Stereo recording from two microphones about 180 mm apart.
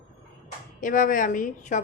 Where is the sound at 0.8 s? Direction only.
50° left (ahead or behind).